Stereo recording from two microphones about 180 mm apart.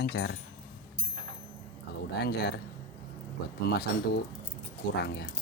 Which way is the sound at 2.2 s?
65° left (ahead or behind).